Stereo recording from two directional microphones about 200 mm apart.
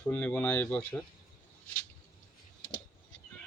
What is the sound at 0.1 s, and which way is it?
Speech, 5° left (ahead or behind).